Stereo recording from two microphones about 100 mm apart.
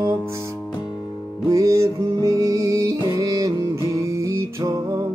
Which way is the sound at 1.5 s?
30° right (ahead or behind).